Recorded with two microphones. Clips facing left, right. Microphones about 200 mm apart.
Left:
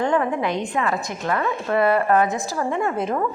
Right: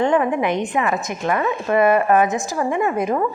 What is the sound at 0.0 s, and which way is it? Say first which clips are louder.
A woman's voice: right 3 dB; 20° right (ahead or behind).